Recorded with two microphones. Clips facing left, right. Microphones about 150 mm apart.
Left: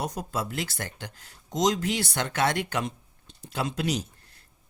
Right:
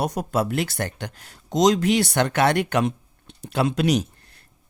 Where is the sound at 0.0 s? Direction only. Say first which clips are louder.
Right 7 dB; 70° right (ahead or behind).